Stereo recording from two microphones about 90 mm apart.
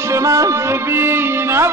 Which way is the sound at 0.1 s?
35° right (ahead or behind).